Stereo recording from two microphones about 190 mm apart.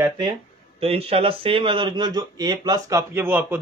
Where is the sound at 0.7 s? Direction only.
30° right (ahead or behind).